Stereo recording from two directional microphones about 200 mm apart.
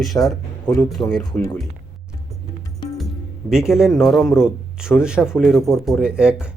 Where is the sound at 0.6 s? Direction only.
20° left (ahead or behind).